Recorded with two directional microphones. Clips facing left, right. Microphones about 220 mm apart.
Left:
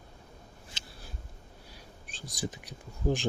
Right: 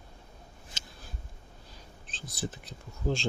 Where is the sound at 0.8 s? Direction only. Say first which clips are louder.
Right 2 dB; 45° right (ahead or behind).